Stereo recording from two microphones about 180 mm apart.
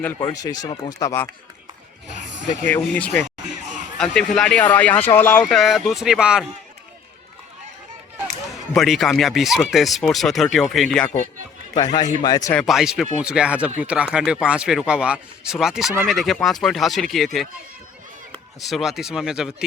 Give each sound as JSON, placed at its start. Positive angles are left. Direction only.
{"t": 0.2, "sound": "speech", "side_deg": 20}
{"t": 2.8, "sound": "speech", "side_deg": 5}
{"t": 8.7, "sound": "speech", "side_deg": 0}
{"t": 11.7, "sound": "speech", "side_deg": 20}
{"t": 12.5, "sound": "speech", "side_deg": 0}
{"t": 18.6, "sound": "speech", "side_deg": 0}